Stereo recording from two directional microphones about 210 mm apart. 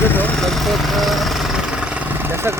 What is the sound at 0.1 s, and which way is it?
Jackhammer, 10° left (ahead or behind).